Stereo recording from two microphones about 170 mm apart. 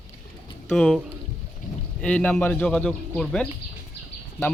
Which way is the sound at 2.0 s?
5° left (ahead or behind).